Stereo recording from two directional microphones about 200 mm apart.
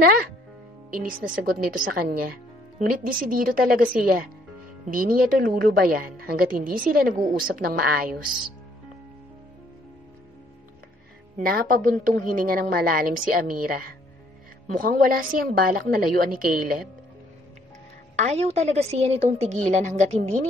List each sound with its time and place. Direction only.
0.8 s a woman's voice: 45° right (ahead or behind)
11.3 s a woman's voice: 45° right (ahead or behind)
18.1 s a woman's voice: 35° right (ahead or behind)